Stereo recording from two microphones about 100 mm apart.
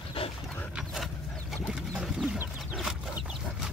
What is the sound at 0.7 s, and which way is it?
Dog, centre (ahead or behind).